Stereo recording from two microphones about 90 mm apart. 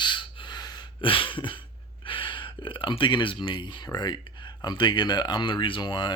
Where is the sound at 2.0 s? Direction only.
75° left (ahead or behind).